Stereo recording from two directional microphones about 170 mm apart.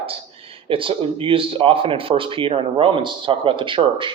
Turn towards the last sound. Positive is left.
turn(degrees=-30)  # may be behind; listen again after turning